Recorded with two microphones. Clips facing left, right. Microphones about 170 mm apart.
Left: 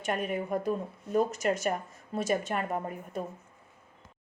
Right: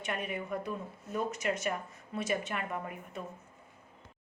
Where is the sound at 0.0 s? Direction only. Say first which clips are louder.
Left 5 dB; 45° left (ahead or behind).